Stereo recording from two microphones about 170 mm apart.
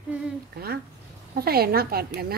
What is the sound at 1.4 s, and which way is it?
Speech, 65° right (ahead or behind).